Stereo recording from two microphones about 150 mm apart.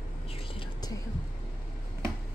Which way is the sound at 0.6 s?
25° left (ahead or behind).